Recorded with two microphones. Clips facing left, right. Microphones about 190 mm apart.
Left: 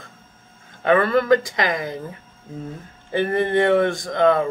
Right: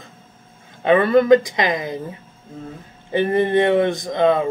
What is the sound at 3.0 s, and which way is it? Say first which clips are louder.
Speech: right 3 dB; 20° right (ahead or behind).